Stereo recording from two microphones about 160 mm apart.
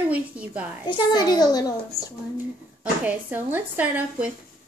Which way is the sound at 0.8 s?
25° left (ahead or behind).